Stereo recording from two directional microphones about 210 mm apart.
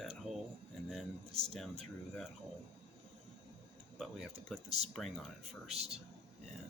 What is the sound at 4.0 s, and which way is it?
Speech, centre (ahead or behind).